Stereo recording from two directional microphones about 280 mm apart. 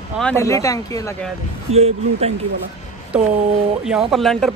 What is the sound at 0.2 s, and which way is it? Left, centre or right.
Speech, centre.